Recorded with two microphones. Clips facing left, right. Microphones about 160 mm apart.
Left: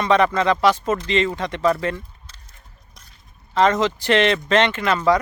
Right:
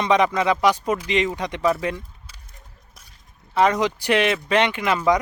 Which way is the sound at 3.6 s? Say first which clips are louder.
Left 1 dB; 10° right (ahead or behind).